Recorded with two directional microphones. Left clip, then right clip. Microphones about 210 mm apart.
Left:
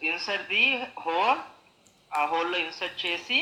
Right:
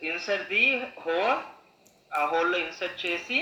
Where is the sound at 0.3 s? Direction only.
45° left (ahead or behind).